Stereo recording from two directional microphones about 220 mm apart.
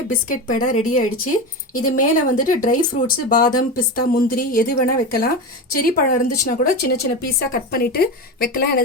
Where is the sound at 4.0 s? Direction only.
40° left (ahead or behind).